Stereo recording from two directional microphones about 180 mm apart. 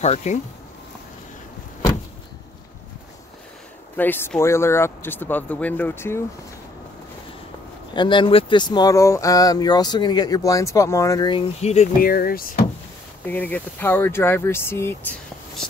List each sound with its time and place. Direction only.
0.0 s speech: 40° left (ahead or behind)
3.9 s speech: 10° left (ahead or behind)
7.9 s speech: 25° left (ahead or behind)
12.0 s speech: 55° left (ahead or behind)
13.2 s speech: 10° left (ahead or behind)